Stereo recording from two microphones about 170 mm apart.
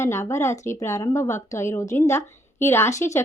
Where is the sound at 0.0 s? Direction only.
15° left (ahead or behind).